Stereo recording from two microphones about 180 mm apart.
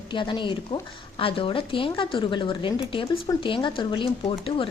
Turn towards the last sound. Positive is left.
turn(degrees=30)  # may be behind; listen again after turning